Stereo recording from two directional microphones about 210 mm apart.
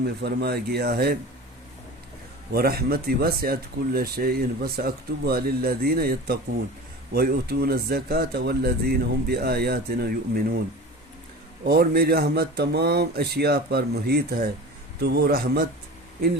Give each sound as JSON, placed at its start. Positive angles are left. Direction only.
{"t": 0.0, "sound": "speech", "side_deg": -50}
{"t": 2.5, "sound": "speech", "side_deg": -50}
{"t": 11.6, "sound": "speech", "side_deg": -45}